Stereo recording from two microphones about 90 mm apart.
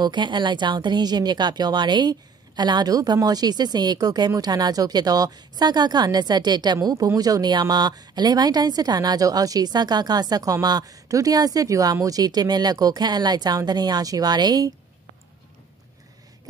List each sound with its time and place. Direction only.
0.0 s a woman's voice: 60° right (ahead or behind)